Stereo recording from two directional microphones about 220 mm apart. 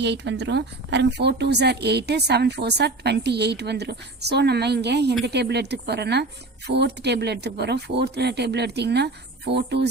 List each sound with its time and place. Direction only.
0.0 s a woman's voice: 50° right (ahead or behind)